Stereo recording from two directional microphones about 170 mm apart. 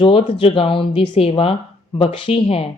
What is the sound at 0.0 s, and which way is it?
Speech, 35° left (ahead or behind).